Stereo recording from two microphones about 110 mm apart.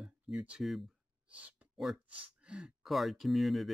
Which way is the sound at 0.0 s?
10° right (ahead or behind).